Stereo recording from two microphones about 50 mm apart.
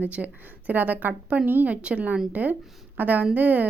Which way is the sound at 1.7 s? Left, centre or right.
Right.